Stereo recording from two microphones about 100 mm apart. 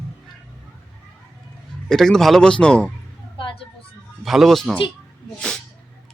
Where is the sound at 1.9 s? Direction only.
5° left (ahead or behind).